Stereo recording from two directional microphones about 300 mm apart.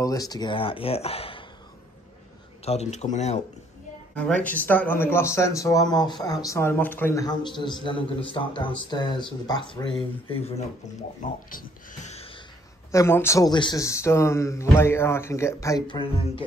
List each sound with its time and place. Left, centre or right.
0.0 s a man's voice: centre
2.6 s speech: left
4.1 s a man's voice: centre
12.9 s a man's voice: centre